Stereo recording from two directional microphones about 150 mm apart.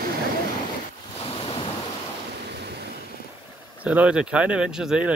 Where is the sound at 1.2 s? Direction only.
40° left (ahead or behind).